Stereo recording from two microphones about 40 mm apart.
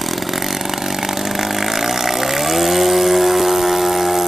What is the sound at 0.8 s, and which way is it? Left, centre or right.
Vehicle, centre.